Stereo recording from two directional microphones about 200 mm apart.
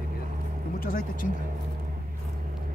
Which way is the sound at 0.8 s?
45° left (ahead or behind).